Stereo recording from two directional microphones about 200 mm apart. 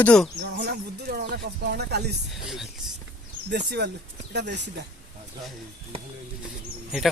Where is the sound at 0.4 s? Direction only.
50° right (ahead or behind).